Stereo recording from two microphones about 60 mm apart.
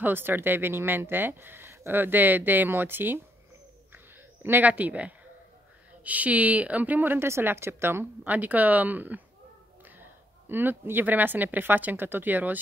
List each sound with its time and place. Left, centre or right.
0.0 s speech: right
3.9 s owl: right
4.6 s a woman's voice: right
7.2 s speech: right
8.3 s a woman's voice: right